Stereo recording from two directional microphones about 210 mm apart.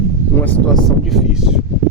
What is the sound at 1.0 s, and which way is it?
Speech, centre (ahead or behind).